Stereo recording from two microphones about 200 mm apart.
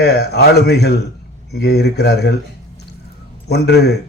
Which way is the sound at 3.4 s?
55° left (ahead or behind).